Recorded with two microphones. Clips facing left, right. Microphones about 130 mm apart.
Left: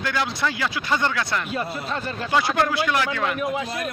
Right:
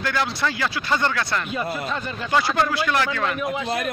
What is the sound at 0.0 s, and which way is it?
Speech, 15° left (ahead or behind).